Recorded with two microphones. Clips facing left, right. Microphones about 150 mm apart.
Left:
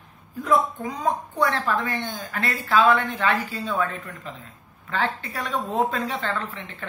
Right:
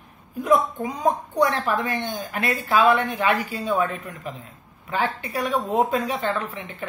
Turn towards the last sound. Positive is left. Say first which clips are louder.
# right 3 dB
turn(degrees=-15)  # may be behind; listen again after turning